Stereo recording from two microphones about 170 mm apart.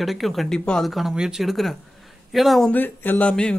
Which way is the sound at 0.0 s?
Centre (ahead or behind).